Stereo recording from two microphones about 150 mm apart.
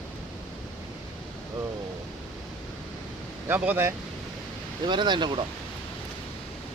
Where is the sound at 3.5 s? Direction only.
15° right (ahead or behind).